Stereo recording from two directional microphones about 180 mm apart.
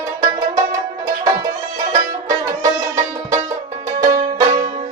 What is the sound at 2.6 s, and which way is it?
Music, 20° right (ahead or behind).